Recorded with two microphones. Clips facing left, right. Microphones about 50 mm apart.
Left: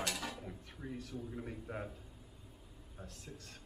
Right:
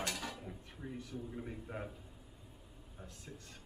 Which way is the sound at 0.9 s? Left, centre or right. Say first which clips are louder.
Left 1 dB; right.